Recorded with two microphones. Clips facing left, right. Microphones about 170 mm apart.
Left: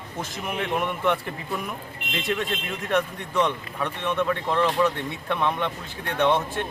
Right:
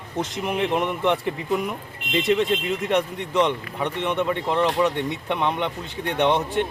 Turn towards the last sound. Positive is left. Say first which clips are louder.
# right 2 dB
turn(degrees=-20)  # may be behind; listen again after turning